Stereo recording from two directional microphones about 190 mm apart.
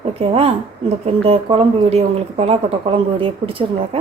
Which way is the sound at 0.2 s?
30° right (ahead or behind).